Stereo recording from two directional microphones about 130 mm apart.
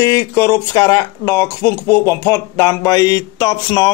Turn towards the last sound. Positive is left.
turn(degrees=30)  # may be behind; listen again after turning